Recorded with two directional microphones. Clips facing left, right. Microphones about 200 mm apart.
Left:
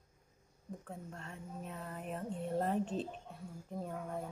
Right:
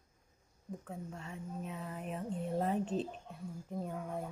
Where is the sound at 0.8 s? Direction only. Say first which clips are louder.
Right 3 dB; 5° right (ahead or behind).